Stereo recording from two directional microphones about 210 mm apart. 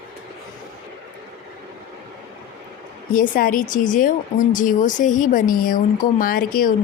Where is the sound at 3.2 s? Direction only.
40° left (ahead or behind).